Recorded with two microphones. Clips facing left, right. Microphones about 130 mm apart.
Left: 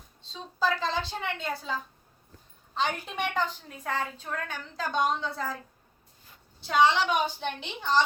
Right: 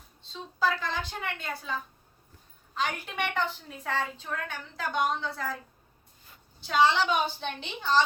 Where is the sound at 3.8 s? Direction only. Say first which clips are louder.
Even; 15° left (ahead or behind).